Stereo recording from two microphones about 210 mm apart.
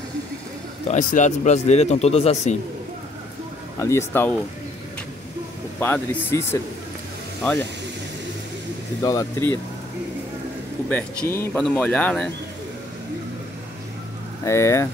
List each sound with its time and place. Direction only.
0.8 s a man's voice: 35° left (ahead or behind)
3.8 s speech: 10° left (ahead or behind)
5.8 s speech: 10° left (ahead or behind)
9.0 s speech: 15° left (ahead or behind)
10.9 s speech: 10° left (ahead or behind)
14.4 s speech: 15° left (ahead or behind)